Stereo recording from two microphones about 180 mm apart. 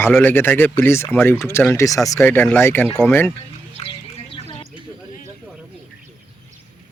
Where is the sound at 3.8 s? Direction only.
35° left (ahead or behind).